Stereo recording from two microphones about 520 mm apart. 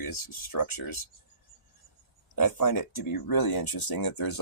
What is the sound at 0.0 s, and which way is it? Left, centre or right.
Speech, left.